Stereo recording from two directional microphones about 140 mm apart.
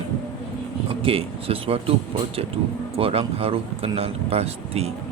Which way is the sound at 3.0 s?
45° right (ahead or behind).